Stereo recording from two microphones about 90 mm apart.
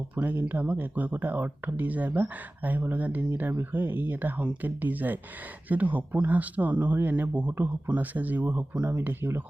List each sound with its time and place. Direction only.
0.2 s speech: 20° right (ahead or behind)